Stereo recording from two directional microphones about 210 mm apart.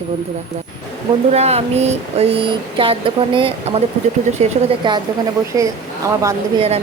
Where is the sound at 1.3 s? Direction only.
30° right (ahead or behind).